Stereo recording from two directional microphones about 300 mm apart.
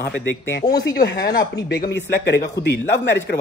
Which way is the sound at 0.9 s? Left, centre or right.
Left.